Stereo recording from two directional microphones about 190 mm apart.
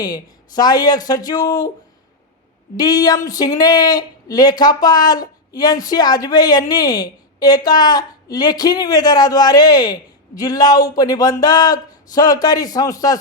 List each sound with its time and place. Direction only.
0.0 s speech: 20° left (ahead or behind)
2.7 s speech: 20° left (ahead or behind)